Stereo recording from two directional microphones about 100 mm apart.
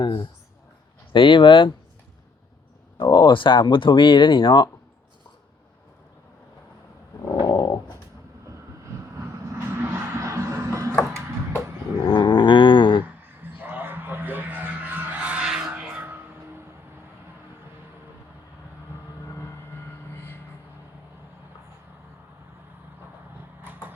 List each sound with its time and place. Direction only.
0.0 s a sound: 50° left (ahead or behind)
1.1 s speech: 55° left (ahead or behind)
3.0 s speech: 45° left (ahead or behind)
7.3 s dog: 40° left (ahead or behind)
9.6 s music: 25° right (ahead or behind)
12.0 s dog: 55° left (ahead or behind)
13.0 s a sound: 20° right (ahead or behind)